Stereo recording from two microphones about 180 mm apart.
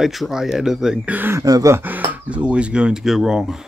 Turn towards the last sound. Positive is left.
turn(degrees=0)  # may be behind; listen again after turning